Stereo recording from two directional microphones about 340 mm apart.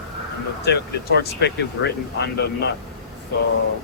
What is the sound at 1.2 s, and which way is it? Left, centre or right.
Speech, left.